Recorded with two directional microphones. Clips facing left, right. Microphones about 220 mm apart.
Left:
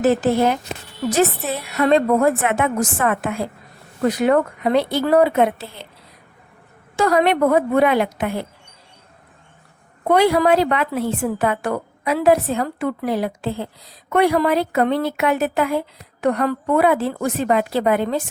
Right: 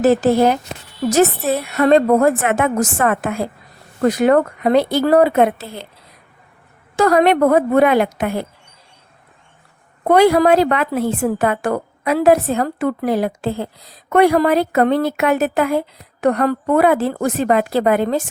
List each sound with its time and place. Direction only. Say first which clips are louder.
0.0 s a woman's voice: right 3 dB; 40° right (ahead or behind)
6.9 s a woman's voice: right 3 dB; 45° right (ahead or behind)
10.0 s a woman's voice: right 4 dB; 45° right (ahead or behind)